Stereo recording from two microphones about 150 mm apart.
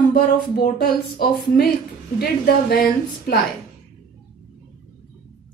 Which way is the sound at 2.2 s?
90° left.